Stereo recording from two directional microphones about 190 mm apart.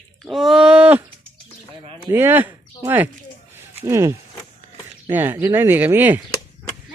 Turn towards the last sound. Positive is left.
turn(degrees=-10)  # may be behind; listen again after turning